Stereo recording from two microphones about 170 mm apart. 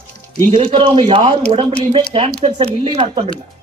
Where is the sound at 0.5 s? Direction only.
35° right (ahead or behind).